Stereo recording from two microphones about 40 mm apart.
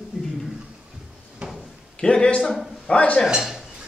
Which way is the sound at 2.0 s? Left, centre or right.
Left.